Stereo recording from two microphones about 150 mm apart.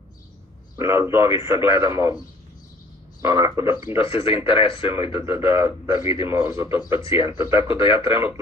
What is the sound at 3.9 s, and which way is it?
Speech, 40° left (ahead or behind).